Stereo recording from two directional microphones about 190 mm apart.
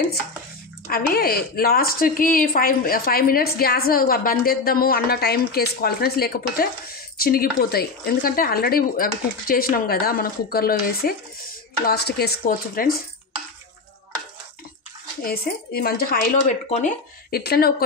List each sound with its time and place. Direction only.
0.8 s a woman's voice: 50° left (ahead or behind)
15.2 s a woman's voice: 55° left (ahead or behind)